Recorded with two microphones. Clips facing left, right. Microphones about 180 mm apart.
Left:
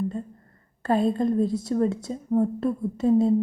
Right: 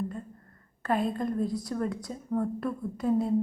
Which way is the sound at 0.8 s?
30° left (ahead or behind).